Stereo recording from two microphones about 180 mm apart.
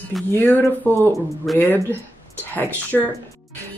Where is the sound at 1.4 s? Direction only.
Centre (ahead or behind).